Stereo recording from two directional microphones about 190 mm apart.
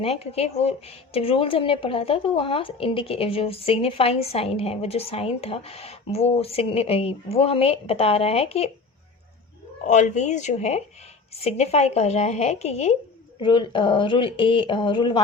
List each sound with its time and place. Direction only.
0.0 s speech: 30° left (ahead or behind)
9.8 s speech: 40° left (ahead or behind)